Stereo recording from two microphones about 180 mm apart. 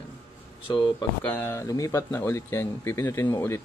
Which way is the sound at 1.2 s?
10° left (ahead or behind).